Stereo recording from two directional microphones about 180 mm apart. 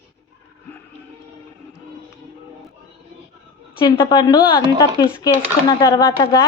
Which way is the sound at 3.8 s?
25° left (ahead or behind).